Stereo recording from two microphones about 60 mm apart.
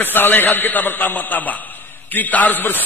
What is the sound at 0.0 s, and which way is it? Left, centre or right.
A man's voice, left.